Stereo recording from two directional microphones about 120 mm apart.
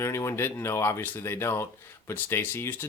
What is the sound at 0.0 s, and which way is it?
Speech, 25° left (ahead or behind).